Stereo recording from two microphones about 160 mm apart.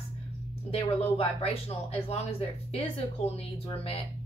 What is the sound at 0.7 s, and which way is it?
Speech, 35° left (ahead or behind).